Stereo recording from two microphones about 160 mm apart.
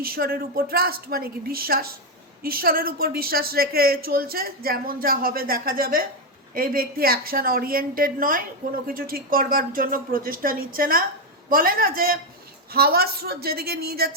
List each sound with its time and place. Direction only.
0.0 s a woman's voice: 70° right (ahead or behind)